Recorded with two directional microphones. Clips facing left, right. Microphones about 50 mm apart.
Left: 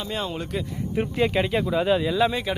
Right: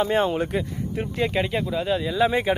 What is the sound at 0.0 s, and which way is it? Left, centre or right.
Speech, right.